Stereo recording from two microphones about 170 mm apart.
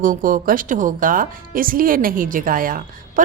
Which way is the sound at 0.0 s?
55° right (ahead or behind).